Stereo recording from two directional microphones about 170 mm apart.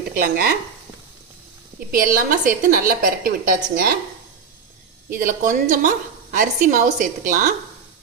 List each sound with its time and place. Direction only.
0.2 s a woman's voice: 65° right (ahead or behind)
1.9 s a woman's voice: 55° right (ahead or behind)
5.1 s a woman's voice: 50° right (ahead or behind)